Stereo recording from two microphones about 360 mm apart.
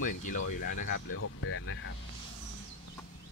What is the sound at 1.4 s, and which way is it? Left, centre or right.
Speech, left.